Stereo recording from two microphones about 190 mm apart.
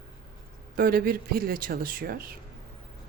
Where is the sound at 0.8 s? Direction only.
50° right (ahead or behind).